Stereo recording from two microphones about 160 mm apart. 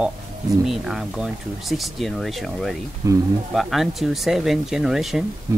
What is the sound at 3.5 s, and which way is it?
Speech, centre (ahead or behind).